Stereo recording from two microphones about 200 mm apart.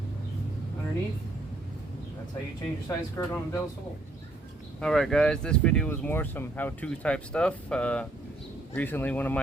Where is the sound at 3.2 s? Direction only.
15° left (ahead or behind).